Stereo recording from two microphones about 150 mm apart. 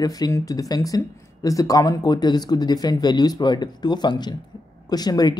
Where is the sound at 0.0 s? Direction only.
25° left (ahead or behind).